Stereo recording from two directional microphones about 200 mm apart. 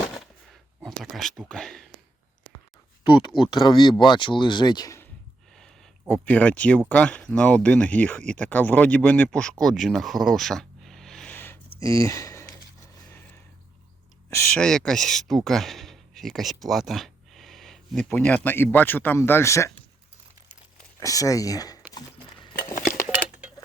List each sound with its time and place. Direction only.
0.8 s speech: centre (ahead or behind)
3.0 s speech: 25° left (ahead or behind)
5.5 s speech: centre (ahead or behind)
14.3 s speech: 10° left (ahead or behind)
21.0 s speech: 15° left (ahead or behind)